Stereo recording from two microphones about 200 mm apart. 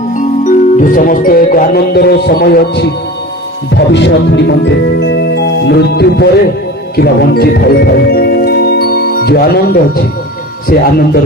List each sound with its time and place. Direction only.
0.2 s music: 40° left (ahead or behind)
3.7 s speech: 60° left (ahead or behind)
6.9 s music: 55° left (ahead or behind)
10.7 s speech: 50° left (ahead or behind)